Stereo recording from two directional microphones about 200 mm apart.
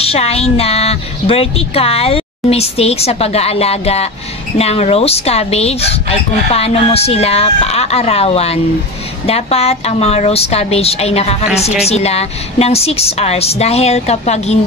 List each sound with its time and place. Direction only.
0.0 s a woman's voice: 30° left (ahead or behind)